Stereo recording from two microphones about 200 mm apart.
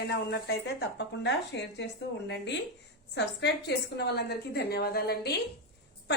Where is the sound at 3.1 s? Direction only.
55° left (ahead or behind).